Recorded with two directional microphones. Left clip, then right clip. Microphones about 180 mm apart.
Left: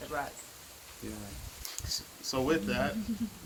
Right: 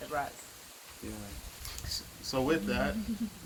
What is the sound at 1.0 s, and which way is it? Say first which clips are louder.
Speech: left 1 dB; 15° left (ahead or behind).